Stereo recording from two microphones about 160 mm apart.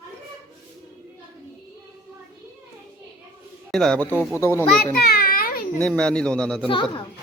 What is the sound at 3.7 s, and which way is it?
A man's voice, 5° left (ahead or behind).